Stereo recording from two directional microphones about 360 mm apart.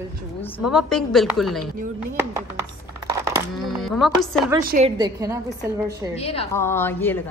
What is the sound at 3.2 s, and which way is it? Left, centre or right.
Speech, centre.